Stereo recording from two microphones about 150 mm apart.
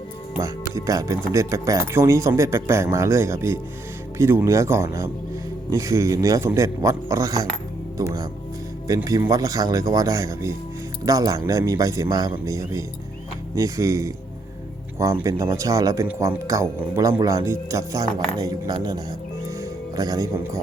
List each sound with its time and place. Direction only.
0.4 s speech: 20° right (ahead or behind)
9.0 s speech: 25° right (ahead or behind)
16.0 s speech: 10° right (ahead or behind)
16.5 s speech: 20° right (ahead or behind)
20.0 s speech: 25° right (ahead or behind)